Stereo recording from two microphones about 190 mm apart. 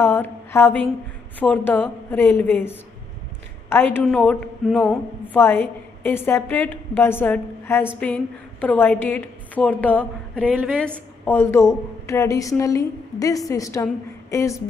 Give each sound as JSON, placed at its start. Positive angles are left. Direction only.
{"t": 0.0, "sound": "a sound", "side_deg": 10}
{"t": 1.4, "sound": "a woman's voice", "side_deg": 10}
{"t": 5.4, "sound": "a woman's voice", "side_deg": 10}